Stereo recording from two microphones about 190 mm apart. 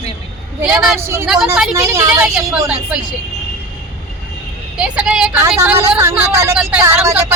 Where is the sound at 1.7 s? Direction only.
15° right (ahead or behind).